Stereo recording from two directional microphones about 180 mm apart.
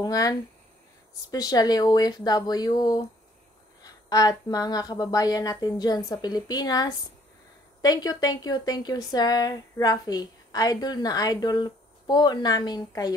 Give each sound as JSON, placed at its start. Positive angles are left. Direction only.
{"t": 0.0, "sound": "speech", "side_deg": 20}